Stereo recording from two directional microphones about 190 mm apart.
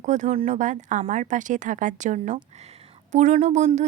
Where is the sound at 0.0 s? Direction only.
40° right (ahead or behind).